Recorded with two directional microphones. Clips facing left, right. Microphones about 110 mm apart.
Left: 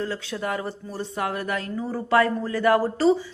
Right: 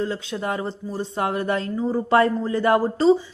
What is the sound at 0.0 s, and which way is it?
A woman's voice, 20° right (ahead or behind).